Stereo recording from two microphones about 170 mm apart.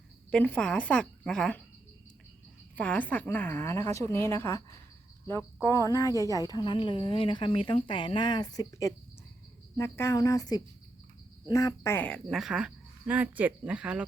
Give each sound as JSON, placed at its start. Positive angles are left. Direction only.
{"t": 0.3, "sound": "a woman's voice", "side_deg": 10}
{"t": 2.7, "sound": "a woman's voice", "side_deg": 10}
{"t": 5.6, "sound": "speech", "side_deg": 20}